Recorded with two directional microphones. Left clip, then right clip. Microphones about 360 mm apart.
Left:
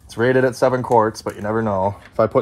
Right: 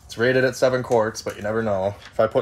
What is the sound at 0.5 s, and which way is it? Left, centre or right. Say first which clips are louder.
Speech: left 3 dB; left.